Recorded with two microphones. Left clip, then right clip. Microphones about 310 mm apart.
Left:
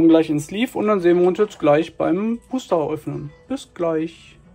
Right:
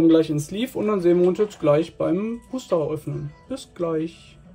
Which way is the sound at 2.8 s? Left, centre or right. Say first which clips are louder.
Left 2 dB; centre.